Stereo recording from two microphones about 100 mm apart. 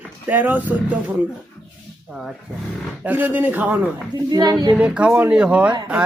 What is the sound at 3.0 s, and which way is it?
Speech, 20° right (ahead or behind).